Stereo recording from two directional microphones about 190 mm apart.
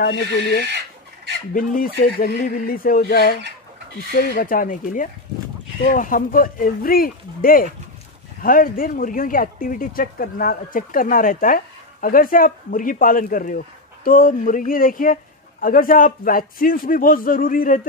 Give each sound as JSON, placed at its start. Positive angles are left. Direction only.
{"t": 0.0, "sound": "speech", "side_deg": 60}
{"t": 0.7, "sound": "chicken", "side_deg": -65}
{"t": 1.5, "sound": "speech", "side_deg": 45}